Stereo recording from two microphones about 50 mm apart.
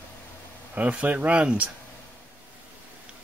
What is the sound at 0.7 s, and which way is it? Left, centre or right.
Speech, right.